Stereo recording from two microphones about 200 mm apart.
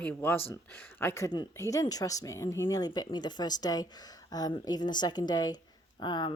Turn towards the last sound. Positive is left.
turn(degrees=20)  # may be behind; listen again after turning